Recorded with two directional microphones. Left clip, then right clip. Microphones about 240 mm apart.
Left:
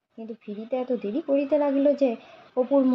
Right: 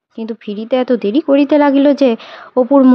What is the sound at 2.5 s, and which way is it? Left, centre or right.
Speech, right.